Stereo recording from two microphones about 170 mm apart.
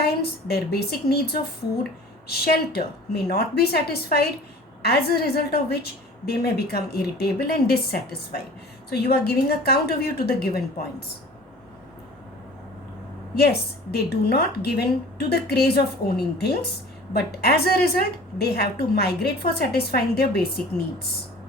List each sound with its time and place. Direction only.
0.0 s a woman's voice: 70° left (ahead or behind)
13.3 s a woman's voice: 70° left (ahead or behind)